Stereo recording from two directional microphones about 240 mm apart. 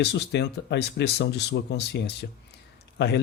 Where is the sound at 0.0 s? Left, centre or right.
Left.